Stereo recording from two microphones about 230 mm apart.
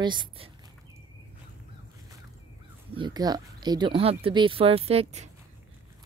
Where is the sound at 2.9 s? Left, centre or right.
Centre.